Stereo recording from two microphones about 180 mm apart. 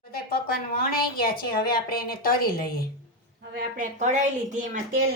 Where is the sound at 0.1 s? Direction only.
60° left (ahead or behind).